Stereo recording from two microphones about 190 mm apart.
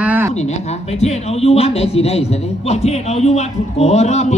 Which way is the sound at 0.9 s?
35° left (ahead or behind).